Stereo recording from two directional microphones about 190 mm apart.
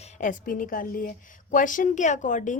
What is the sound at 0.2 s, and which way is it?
A woman's voice, 45° left (ahead or behind).